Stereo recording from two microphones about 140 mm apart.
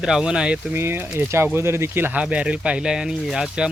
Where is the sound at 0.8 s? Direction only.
15° right (ahead or behind).